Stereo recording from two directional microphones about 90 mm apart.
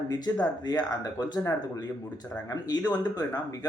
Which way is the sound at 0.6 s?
50° left (ahead or behind).